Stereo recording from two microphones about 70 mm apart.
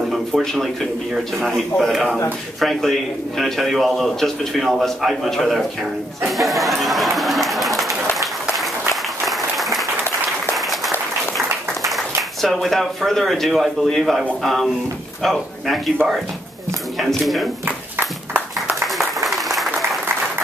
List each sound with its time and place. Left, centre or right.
0.1 s a man's voice: centre
9.2 s applause: centre
11.9 s a man's voice: centre
16.0 s speech: right
17.0 s a man's voice: centre
17.6 s a sound: right
18.9 s applause: centre